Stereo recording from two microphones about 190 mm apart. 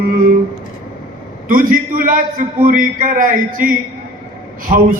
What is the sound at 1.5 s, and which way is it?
A man's voice, 45° right (ahead or behind).